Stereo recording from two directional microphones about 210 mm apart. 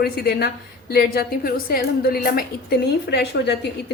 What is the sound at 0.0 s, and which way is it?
A woman's voice, 50° left (ahead or behind).